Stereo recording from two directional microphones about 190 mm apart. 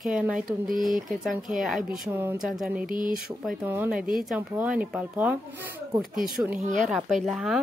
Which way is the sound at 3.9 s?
45° right (ahead or behind).